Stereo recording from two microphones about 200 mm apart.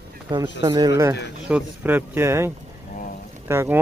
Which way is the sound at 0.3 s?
20° right (ahead or behind).